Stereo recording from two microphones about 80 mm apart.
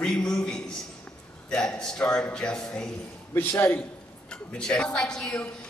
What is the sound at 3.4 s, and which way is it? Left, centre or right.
Speech, left.